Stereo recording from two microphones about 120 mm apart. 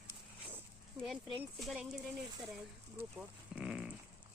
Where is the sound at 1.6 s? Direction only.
Centre (ahead or behind).